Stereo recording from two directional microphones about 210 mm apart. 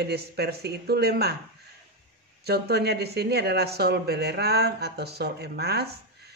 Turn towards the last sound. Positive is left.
turn(degrees=-50)  # may be behind; listen again after turning